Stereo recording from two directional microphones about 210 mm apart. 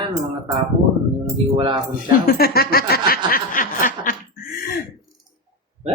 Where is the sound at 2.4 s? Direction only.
45° left (ahead or behind).